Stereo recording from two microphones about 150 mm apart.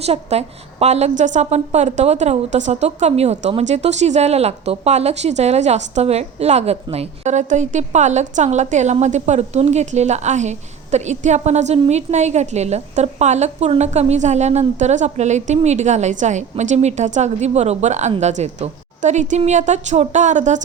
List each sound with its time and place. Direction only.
0.0 s a woman's voice: 45° right (ahead or behind)